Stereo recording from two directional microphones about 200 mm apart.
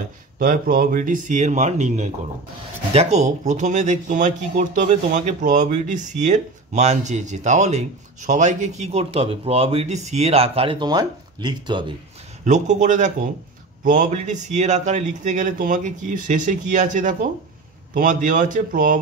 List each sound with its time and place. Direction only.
0.4 s speech: 45° right (ahead or behind); by 11.9 s 20° right (ahead or behind)
12.4 s speech: 35° right (ahead or behind)